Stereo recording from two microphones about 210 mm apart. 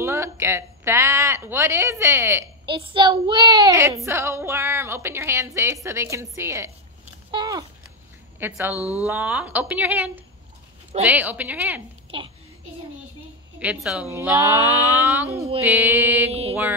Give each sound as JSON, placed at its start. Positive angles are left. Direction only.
{"t": 0.0, "sound": "speech", "side_deg": -10}
{"t": 2.6, "sound": "speech", "side_deg": -20}
{"t": 7.2, "sound": "a sound", "side_deg": -20}
{"t": 8.4, "sound": "speech", "side_deg": -10}
{"t": 8.7, "sound": "speech", "side_deg": 15}
{"t": 9.0, "sound": "speech", "side_deg": -10}
{"t": 12.1, "sound": "mantra", "side_deg": -25}
{"t": 13.6, "sound": "speech", "side_deg": -5}
{"t": 16.3, "sound": "mantra", "side_deg": -30}